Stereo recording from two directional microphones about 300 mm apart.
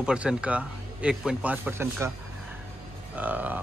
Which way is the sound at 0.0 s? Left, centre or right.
Centre.